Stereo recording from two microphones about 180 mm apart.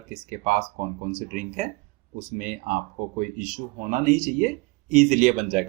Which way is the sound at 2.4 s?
45° right (ahead or behind).